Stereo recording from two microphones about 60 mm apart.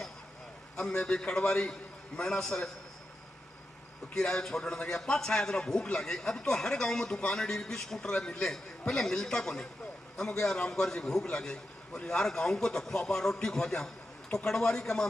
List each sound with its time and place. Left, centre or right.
0.7 s a man's voice: centre
4.1 s a man's voice: centre
10.7 s a man's voice: centre